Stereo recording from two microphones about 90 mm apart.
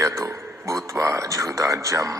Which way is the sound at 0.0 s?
35° right (ahead or behind).